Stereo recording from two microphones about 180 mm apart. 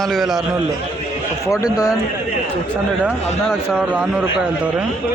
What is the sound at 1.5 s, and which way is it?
Speech, 20° left (ahead or behind).